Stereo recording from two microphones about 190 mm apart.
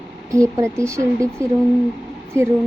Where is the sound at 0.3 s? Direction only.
15° right (ahead or behind).